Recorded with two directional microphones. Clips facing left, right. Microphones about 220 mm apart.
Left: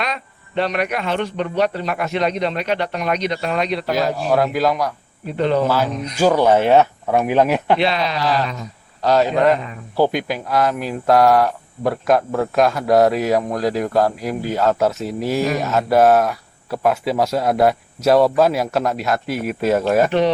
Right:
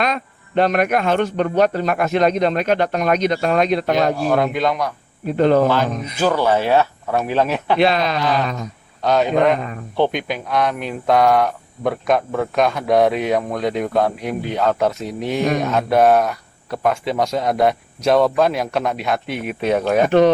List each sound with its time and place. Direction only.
0.0 s speech: 50° right (ahead or behind)
4.2 s speech: centre (ahead or behind)
5.4 s speech: 45° right (ahead or behind)
5.6 s speech: 5° left (ahead or behind)
7.8 s speech: 45° right (ahead or behind)
8.2 s speech: centre (ahead or behind)
20.1 s speech: 50° right (ahead or behind)